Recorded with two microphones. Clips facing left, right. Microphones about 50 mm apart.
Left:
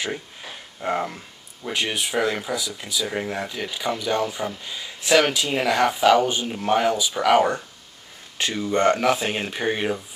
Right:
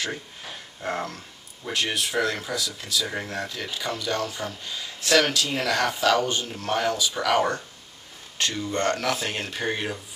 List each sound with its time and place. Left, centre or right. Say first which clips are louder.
0.7 s speech: left 5 dB; centre